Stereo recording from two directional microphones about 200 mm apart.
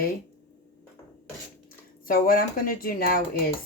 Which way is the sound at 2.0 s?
45° left (ahead or behind).